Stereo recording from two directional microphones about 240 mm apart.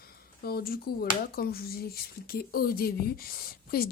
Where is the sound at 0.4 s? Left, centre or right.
Left.